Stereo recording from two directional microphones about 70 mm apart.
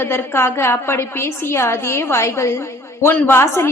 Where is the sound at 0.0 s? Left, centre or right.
Left.